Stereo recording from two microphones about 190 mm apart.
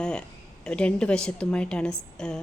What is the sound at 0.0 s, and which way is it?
A woman's voice, 5° left (ahead or behind).